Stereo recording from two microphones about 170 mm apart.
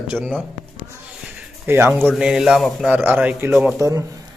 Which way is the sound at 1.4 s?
15° right (ahead or behind).